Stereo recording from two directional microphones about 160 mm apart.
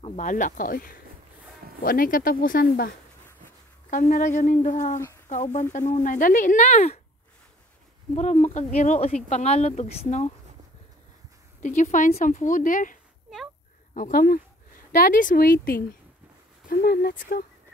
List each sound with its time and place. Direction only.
0.2 s speech: 55° left (ahead or behind)
4.1 s speech: 50° left (ahead or behind)
8.2 s speech: 45° left (ahead or behind)
11.6 s speech: 50° left (ahead or behind)